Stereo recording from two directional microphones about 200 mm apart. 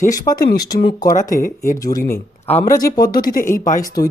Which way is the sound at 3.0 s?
45° left (ahead or behind).